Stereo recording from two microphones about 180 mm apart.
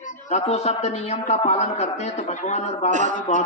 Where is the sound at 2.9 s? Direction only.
45° right (ahead or behind).